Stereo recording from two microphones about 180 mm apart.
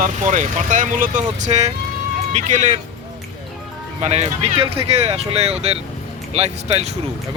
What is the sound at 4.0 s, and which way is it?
Speech, 35° right (ahead or behind).